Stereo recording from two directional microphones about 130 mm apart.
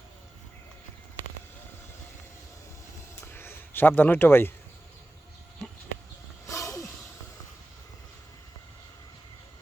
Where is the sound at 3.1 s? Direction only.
15° left (ahead or behind).